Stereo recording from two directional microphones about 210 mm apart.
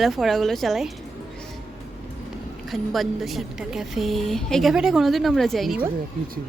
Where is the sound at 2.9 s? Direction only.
Centre (ahead or behind).